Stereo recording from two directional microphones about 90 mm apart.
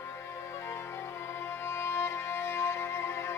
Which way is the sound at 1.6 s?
30° left (ahead or behind).